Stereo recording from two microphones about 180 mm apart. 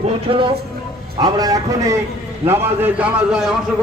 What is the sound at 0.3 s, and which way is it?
A man's voice, 30° right (ahead or behind).